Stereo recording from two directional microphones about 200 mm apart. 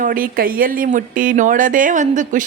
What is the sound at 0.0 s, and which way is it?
Speech, 45° right (ahead or behind).